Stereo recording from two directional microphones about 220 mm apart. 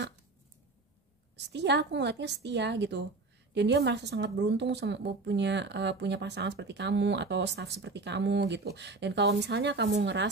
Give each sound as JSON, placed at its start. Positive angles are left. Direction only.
{"t": 1.3, "sound": "a woman's voice", "side_deg": -50}